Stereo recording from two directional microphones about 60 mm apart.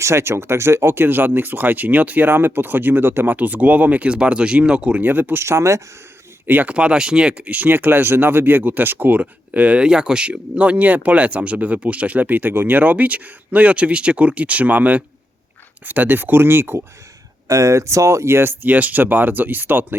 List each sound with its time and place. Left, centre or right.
0.0 s speech: right
3.3 s speech: right
6.5 s speech: right
6.7 s speech: centre; by 16.8 s right
17.5 s speech: right